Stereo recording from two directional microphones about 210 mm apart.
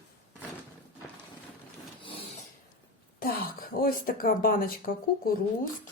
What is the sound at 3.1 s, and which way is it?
Speech, 45° left (ahead or behind).